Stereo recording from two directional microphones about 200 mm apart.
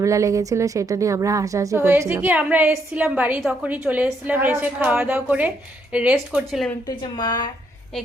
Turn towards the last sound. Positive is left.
turn(degrees=20)  # may be behind; listen again after turning